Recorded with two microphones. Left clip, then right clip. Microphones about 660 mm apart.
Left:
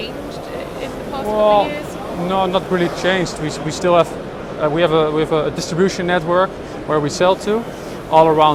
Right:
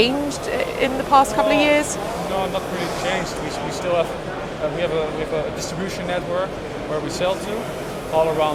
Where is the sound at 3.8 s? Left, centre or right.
Left.